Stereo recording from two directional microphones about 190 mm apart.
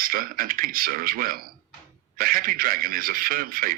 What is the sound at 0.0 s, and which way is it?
Speech, 50° right (ahead or behind).